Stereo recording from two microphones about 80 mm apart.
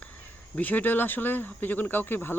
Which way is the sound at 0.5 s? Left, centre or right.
Left.